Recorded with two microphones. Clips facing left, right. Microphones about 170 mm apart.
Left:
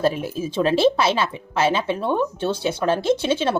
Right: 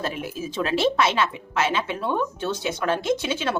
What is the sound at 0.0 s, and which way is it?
Speech, 30° left (ahead or behind).